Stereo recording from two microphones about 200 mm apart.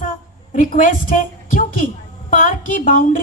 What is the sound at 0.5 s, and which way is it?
A woman's voice, 40° left (ahead or behind).